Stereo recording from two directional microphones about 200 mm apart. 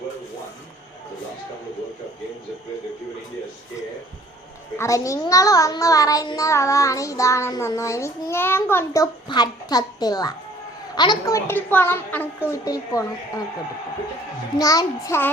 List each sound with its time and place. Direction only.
4.8 s a child's voice: 15° left (ahead or behind)
14.6 s a child's voice: 15° left (ahead or behind)